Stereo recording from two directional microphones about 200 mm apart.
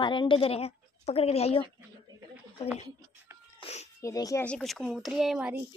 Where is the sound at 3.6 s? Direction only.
30° left (ahead or behind).